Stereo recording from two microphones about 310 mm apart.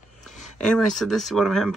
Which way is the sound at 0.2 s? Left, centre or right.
Centre.